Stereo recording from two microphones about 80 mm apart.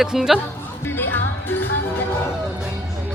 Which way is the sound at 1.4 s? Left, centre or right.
Left.